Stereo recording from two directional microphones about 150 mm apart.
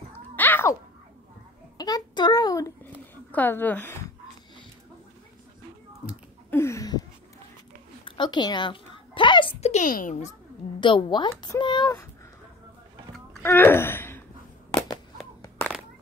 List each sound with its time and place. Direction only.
0.4 s a sound: 15° left (ahead or behind)
1.8 s a child's voice: 25° left (ahead or behind)
6.5 s a sound: 20° left (ahead or behind)
8.0 s a woman's voice: 30° left (ahead or behind); by 9.8 s 45° left (ahead or behind)
9.8 s a child's voice: 60° left (ahead or behind)
10.8 s speech: 30° left (ahead or behind)
13.4 s speech: 15° left (ahead or behind)